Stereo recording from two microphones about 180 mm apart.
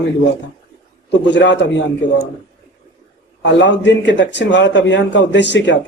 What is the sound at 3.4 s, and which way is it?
A man's voice, 80° left.